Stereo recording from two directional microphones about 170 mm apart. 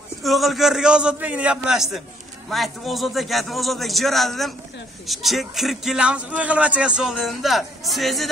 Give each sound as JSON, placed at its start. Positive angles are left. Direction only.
{"t": 0.2, "sound": "a man's voice", "side_deg": 0}